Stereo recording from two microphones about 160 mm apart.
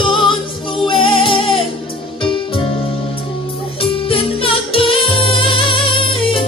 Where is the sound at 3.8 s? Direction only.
35° left (ahead or behind).